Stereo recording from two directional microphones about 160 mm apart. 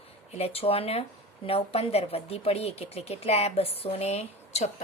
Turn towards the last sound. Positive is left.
turn(degrees=45)  # may be behind; listen again after turning